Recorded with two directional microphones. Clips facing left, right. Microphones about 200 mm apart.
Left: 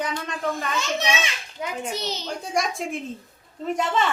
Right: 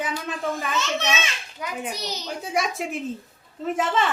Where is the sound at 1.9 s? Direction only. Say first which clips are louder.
Left 3 dB; 25° left (ahead or behind).